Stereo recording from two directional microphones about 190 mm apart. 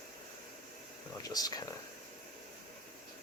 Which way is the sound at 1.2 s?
20° left (ahead or behind).